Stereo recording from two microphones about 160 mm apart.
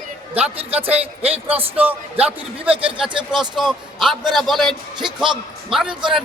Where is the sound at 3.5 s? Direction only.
Centre (ahead or behind).